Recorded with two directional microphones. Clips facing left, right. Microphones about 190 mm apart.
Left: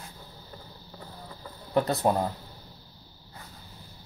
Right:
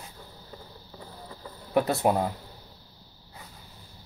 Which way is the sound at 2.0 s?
10° right (ahead or behind).